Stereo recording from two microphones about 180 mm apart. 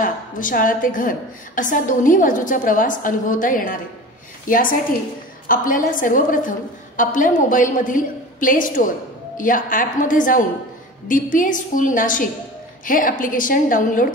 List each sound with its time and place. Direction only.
0.0 s a woman's voice: 50° left (ahead or behind)